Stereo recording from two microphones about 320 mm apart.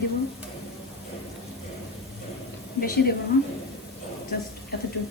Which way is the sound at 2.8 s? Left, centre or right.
Left.